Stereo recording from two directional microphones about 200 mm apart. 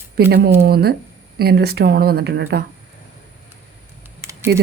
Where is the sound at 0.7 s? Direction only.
50° right (ahead or behind).